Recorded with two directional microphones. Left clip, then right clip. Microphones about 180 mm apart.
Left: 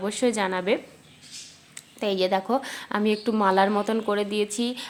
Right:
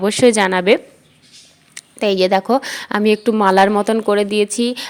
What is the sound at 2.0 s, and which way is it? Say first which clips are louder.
A woman's voice: right 9 dB; 40° right (ahead or behind).